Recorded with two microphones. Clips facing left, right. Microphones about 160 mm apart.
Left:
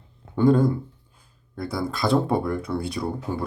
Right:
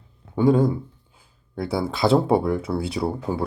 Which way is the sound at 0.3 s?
5° right (ahead or behind).